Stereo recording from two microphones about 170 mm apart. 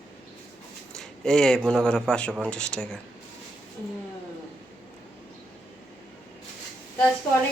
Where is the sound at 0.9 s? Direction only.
5° left (ahead or behind).